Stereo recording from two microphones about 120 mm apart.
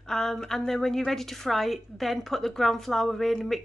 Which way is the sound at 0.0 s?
5° left (ahead or behind).